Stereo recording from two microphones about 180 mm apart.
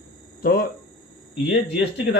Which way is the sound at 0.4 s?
55° left (ahead or behind).